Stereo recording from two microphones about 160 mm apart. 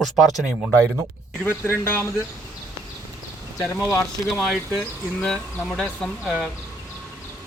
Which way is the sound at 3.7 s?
15° left (ahead or behind).